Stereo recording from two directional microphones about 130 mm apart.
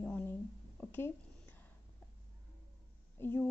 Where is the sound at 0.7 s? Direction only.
15° left (ahead or behind).